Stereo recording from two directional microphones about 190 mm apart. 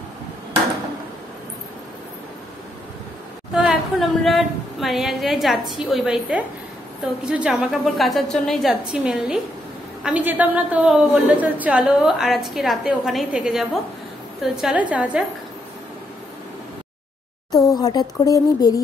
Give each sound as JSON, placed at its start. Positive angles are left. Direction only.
{"t": 3.5, "sound": "a woman's voice", "side_deg": 0}
{"t": 17.6, "sound": "speech", "side_deg": 20}